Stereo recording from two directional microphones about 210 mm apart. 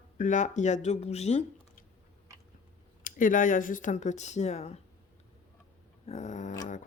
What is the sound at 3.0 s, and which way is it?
Speech, 40° left (ahead or behind).